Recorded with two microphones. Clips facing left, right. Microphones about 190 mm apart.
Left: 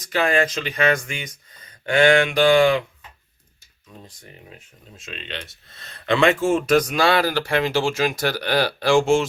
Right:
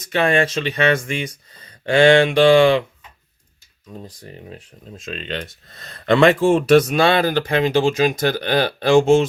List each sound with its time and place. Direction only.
0.0 s speech: 25° right (ahead or behind)
4.0 s speech: 35° right (ahead or behind)